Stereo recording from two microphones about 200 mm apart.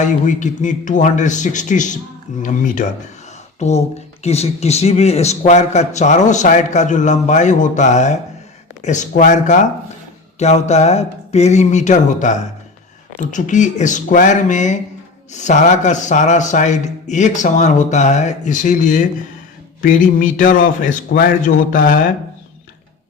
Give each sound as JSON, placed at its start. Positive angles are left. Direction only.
{"t": 0.0, "sound": "speech", "side_deg": 40}
{"t": 3.6, "sound": "a man's voice", "side_deg": 35}